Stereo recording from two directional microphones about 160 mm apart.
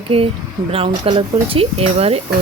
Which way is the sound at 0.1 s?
40° right (ahead or behind).